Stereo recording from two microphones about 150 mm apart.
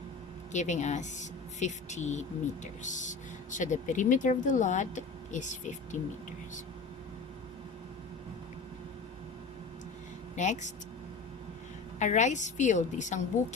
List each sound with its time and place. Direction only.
0.5 s speech: 50° left (ahead or behind)
10.3 s speech: 50° left (ahead or behind)
11.9 s speech: 50° left (ahead or behind)